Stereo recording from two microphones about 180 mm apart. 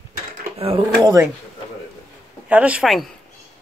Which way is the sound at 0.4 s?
30° right (ahead or behind).